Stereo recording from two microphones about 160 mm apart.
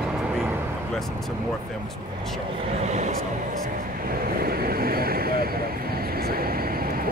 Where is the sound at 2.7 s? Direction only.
45° right (ahead or behind).